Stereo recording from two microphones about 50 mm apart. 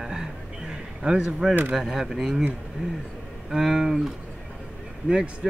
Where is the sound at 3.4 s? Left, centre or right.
Centre.